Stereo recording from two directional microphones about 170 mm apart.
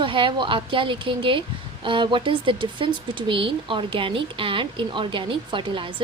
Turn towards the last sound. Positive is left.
turn(degrees=-30)  # may be behind; listen again after turning